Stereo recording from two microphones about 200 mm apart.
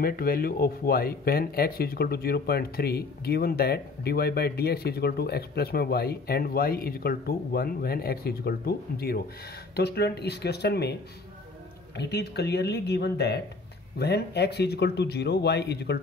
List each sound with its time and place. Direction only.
0.0 s speech: 50° left (ahead or behind)
12.0 s speech: 55° left (ahead or behind)